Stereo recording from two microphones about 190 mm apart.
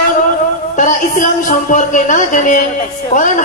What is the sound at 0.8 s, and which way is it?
A man's voice, 40° left (ahead or behind).